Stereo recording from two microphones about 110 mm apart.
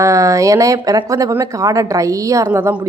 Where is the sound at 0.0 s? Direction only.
30° right (ahead or behind).